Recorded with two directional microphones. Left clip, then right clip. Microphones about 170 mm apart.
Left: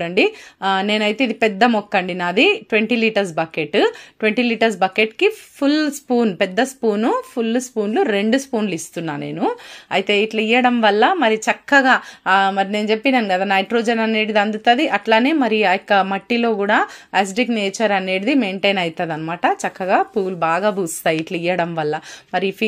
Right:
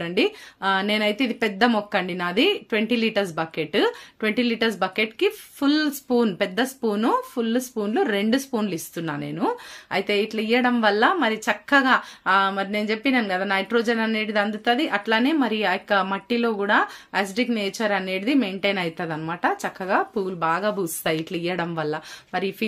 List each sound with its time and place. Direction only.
0.0 s a woman's voice: 20° left (ahead or behind)